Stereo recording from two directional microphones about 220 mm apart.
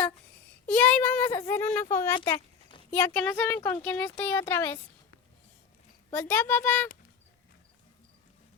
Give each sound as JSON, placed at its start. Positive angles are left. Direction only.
{"t": 0.7, "sound": "speech", "side_deg": 5}
{"t": 2.1, "sound": "a sound", "side_deg": 20}
{"t": 2.9, "sound": "speech", "side_deg": 5}
{"t": 6.1, "sound": "speech", "side_deg": 10}